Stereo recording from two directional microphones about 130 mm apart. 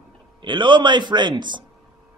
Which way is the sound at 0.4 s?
35° right (ahead or behind).